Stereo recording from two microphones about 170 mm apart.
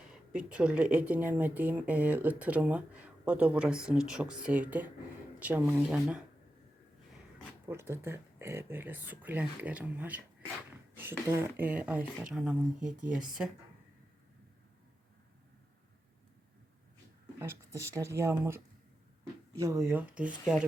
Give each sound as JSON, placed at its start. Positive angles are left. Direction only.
{"t": 0.1, "sound": "speech", "side_deg": -5}
{"t": 7.7, "sound": "speech", "side_deg": -15}
{"t": 17.4, "sound": "speech", "side_deg": -15}